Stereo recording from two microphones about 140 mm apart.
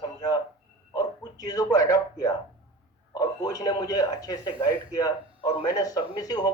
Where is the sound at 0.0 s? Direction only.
25° left (ahead or behind).